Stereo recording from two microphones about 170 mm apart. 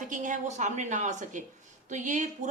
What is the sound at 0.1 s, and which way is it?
A woman's voice, 50° right (ahead or behind).